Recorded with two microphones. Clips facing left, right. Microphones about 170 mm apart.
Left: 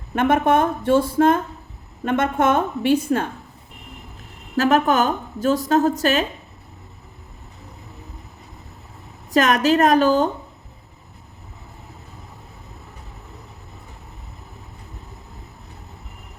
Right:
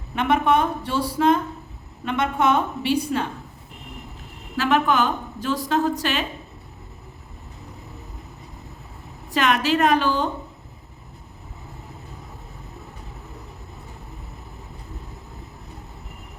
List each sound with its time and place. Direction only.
0.1 s speech: 50° left (ahead or behind)
4.5 s speech: 45° left (ahead or behind)
9.3 s speech: 45° left (ahead or behind)